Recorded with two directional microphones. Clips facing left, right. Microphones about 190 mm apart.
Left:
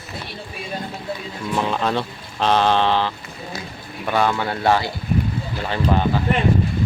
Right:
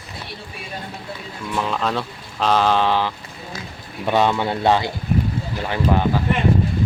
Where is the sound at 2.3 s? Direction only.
5° right (ahead or behind).